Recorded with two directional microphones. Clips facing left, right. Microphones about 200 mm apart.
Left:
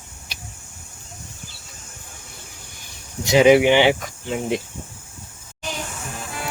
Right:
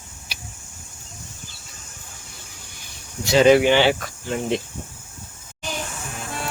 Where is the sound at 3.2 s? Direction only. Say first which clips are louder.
Left 1 dB; 15° left (ahead or behind).